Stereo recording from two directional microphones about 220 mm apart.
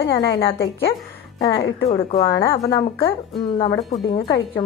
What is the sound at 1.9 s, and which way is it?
Speech, 20° left (ahead or behind).